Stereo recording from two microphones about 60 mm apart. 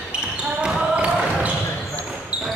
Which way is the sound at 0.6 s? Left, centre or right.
Centre.